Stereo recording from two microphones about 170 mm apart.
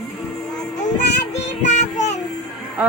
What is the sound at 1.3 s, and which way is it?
Child singing, 40° left (ahead or behind).